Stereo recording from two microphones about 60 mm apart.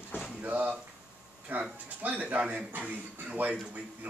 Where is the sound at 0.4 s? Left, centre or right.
Right.